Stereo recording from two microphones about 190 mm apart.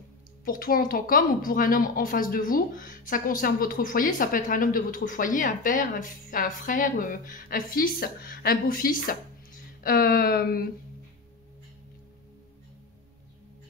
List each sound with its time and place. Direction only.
0.5 s speech: 50° left (ahead or behind)